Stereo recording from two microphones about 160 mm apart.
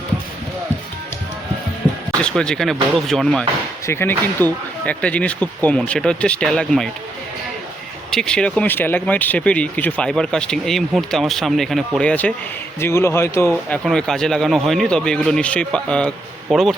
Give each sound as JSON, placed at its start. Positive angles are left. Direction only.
{"t": 2.2, "sound": "speech", "side_deg": 5}
{"t": 3.8, "sound": "speech", "side_deg": 15}
{"t": 8.1, "sound": "speech", "side_deg": 5}